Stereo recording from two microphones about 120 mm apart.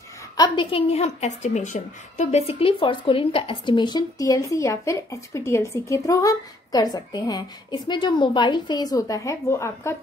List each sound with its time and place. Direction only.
0.4 s a woman's voice: 45° left (ahead or behind); by 9.9 s 25° left (ahead or behind)